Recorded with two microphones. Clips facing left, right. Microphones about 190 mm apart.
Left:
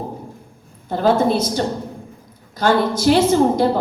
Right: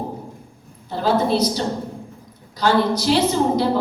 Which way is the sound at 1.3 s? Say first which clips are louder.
Left 1 dB; 50° left (ahead or behind).